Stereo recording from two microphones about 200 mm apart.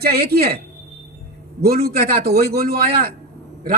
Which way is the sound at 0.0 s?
50° right (ahead or behind).